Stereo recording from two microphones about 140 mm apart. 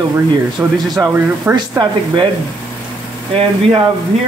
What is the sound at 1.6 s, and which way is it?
Speech, 35° right (ahead or behind).